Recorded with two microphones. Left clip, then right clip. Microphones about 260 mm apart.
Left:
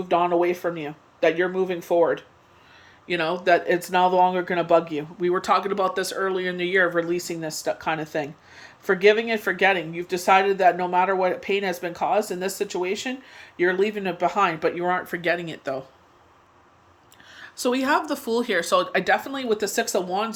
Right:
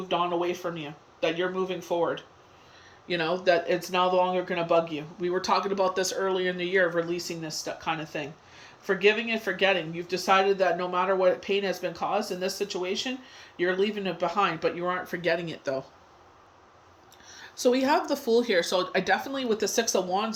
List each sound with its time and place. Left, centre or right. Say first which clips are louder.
0.1 s speech: left 6 dB; centre
17.2 s a sound: right 1 dB; centre
18.1 s speech: even; centre